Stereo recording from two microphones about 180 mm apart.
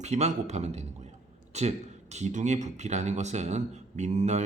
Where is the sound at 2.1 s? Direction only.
40° right (ahead or behind).